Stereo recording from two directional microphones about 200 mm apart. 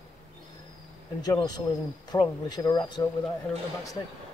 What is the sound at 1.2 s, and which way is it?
Speech, 20° left (ahead or behind).